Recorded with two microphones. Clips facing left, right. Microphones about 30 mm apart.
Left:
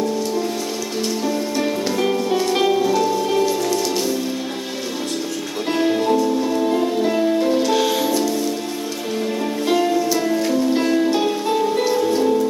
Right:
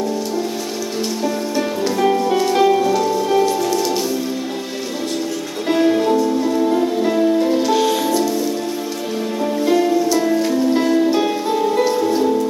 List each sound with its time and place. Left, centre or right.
1.2 s music: centre
5.6 s music: centre
9.6 s music: centre
10.8 s music: centre